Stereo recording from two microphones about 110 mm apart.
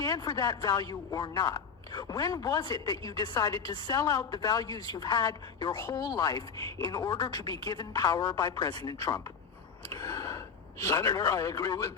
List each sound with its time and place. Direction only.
0.0 s a man's voice: 35° left (ahead or behind)
9.9 s a sound: 30° left (ahead or behind)
10.8 s a man's voice: 30° left (ahead or behind)